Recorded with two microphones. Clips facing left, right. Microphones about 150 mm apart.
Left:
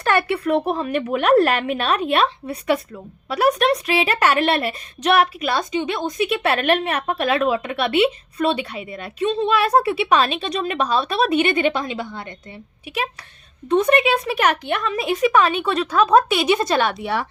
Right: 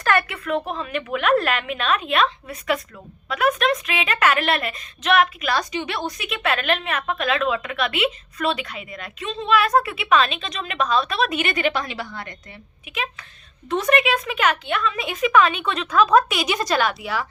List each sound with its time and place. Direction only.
0.0 s a woman's voice: 30° left (ahead or behind)
13.8 s a woman's voice: 30° left (ahead or behind)